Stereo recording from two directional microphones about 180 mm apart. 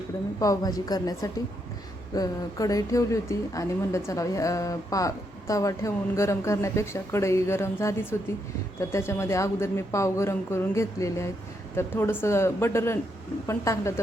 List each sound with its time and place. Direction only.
0.3 s a woman's voice: 20° left (ahead or behind)